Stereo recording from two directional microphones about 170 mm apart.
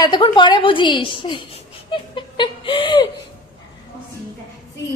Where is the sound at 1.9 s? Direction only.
30° left (ahead or behind).